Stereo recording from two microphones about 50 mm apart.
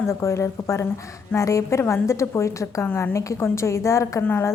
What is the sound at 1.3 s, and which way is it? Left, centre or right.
A woman's voice, left.